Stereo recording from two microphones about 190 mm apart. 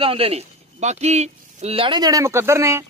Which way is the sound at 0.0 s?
30° right (ahead or behind).